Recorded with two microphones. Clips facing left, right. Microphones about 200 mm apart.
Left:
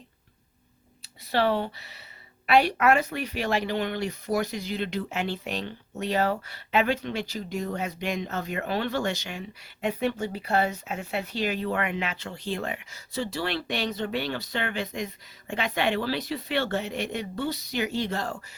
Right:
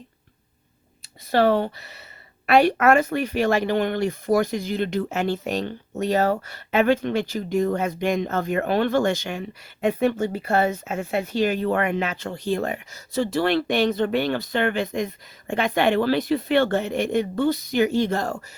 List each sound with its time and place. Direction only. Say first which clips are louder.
1.3 s speech: right 6 dB; 45° right (ahead or behind)